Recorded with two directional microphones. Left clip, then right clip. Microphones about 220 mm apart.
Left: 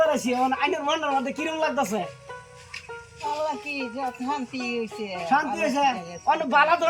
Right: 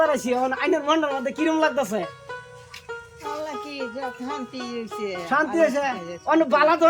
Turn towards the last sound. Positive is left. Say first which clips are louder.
# right 3 dB
turn(degrees=-20)  # may be behind; listen again after turning